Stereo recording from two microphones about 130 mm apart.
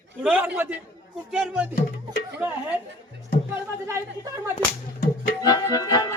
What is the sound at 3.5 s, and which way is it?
Speech, 20° right (ahead or behind).